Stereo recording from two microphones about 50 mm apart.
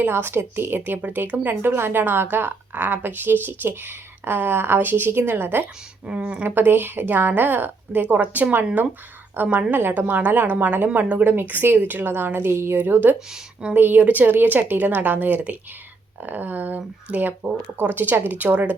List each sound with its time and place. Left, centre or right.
0.1 s speech: right
1.0 s speech: right
6.1 s speech: right
6.5 s speech: right
11.3 s speech: right
12.7 s speech: right